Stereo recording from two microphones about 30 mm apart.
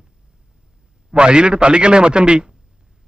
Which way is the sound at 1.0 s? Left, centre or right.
Right.